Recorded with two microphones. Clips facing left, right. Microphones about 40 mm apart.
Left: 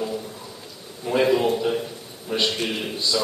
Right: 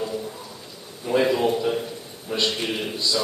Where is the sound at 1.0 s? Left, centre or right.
Centre.